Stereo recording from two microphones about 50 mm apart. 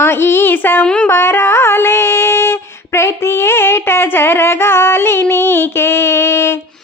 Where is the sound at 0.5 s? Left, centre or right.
Left.